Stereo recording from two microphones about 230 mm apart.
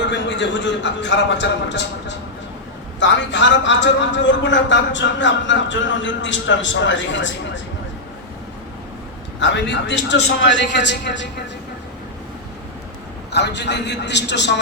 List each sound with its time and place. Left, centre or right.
0.1 s a man's voice: left
9.4 s a man's voice: left
13.3 s a man's voice: left